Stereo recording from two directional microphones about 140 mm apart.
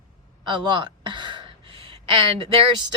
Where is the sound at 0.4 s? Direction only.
35° right (ahead or behind).